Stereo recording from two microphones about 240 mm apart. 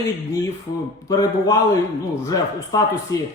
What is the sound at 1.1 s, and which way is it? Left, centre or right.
A man's voice, centre.